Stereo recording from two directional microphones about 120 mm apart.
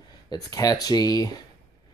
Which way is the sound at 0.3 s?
30° left (ahead or behind).